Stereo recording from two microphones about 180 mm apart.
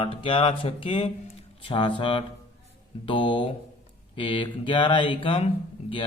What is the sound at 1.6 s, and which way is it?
Speech, 30° left (ahead or behind).